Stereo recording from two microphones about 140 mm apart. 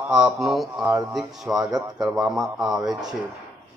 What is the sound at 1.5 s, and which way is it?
Speech, 15° right (ahead or behind).